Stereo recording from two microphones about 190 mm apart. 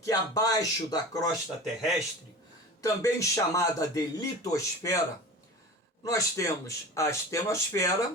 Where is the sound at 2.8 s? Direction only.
15° left (ahead or behind).